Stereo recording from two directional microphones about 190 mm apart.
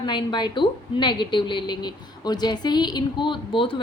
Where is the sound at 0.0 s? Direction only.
25° left (ahead or behind).